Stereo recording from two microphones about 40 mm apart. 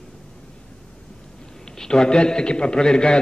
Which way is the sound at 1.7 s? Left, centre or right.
Centre.